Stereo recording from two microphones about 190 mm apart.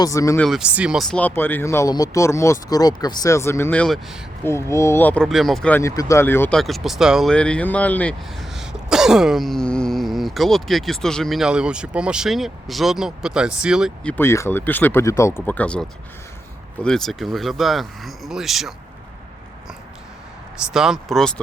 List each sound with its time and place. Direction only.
0.0 s speech: 15° left (ahead or behind)
0.4 s speech: 5° right (ahead or behind)
4.4 s speech: 15° left (ahead or behind); by 18.7 s centre (ahead or behind)
20.7 s speech: centre (ahead or behind)